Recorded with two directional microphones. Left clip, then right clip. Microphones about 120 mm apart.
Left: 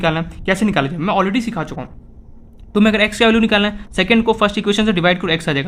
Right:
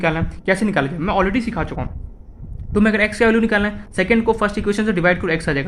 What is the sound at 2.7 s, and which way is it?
Speech, 55° left (ahead or behind).